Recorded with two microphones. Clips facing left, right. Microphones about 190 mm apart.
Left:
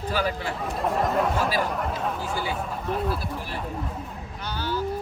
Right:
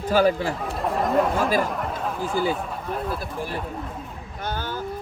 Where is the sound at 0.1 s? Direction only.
40° right (ahead or behind).